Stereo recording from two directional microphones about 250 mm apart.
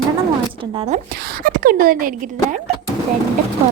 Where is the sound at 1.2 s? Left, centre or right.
Right.